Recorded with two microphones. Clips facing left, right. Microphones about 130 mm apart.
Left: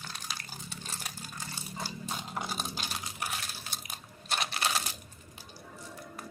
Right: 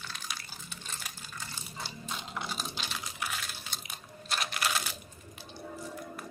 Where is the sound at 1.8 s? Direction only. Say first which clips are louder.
Left 2 dB; 40° left (ahead or behind).